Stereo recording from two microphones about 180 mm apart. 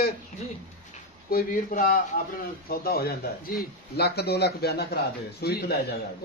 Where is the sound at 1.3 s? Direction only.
55° left (ahead or behind).